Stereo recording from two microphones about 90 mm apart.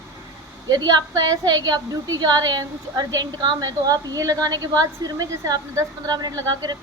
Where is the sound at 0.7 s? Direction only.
50° right (ahead or behind).